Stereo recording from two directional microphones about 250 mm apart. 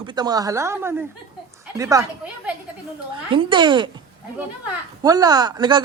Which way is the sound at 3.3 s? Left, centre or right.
Centre.